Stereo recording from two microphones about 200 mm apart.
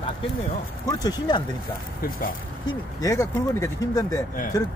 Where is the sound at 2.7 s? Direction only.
15° left (ahead or behind).